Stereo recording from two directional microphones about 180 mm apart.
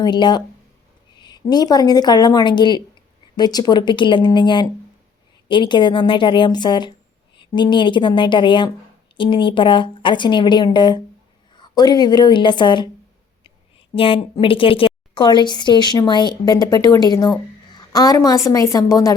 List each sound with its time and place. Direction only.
0.0 s speech: 25° left (ahead or behind)
13.9 s a woman's voice: 30° left (ahead or behind)